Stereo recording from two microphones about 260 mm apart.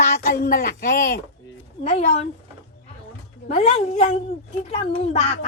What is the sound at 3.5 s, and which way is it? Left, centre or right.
A child's voice, left.